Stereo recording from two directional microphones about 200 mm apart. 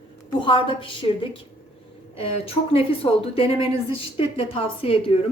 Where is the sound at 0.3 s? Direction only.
25° left (ahead or behind).